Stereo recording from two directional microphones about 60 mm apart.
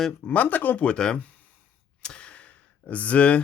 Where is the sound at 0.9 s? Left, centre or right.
Centre.